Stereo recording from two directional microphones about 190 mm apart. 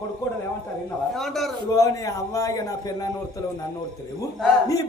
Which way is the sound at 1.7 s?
15° left (ahead or behind).